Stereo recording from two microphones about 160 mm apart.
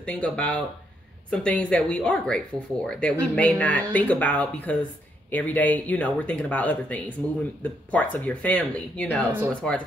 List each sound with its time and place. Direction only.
0.0 s speech: 5° left (ahead or behind)